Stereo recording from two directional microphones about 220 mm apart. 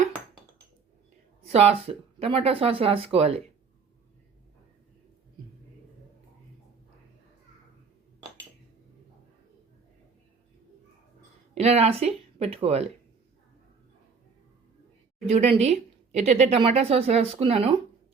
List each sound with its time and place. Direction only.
1.5 s a woman's voice: 25° right (ahead or behind)
11.5 s speech: 30° right (ahead or behind)
15.3 s a woman's voice: 30° right (ahead or behind)